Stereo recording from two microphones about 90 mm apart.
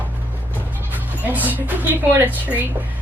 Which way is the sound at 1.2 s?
20° right (ahead or behind).